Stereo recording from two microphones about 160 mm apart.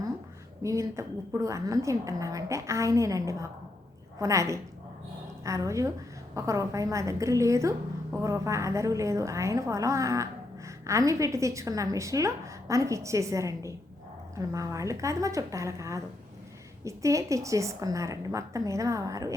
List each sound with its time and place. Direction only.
0.6 s a woman's voice: 20° right (ahead or behind)